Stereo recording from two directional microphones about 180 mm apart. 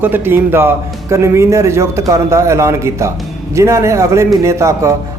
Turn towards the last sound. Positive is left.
turn(degrees=-15)  # may be behind; listen again after turning